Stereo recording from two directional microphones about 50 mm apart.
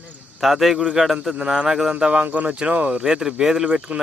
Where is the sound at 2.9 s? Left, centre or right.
Centre.